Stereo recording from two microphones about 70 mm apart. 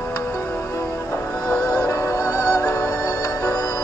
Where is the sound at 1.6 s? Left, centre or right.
Left.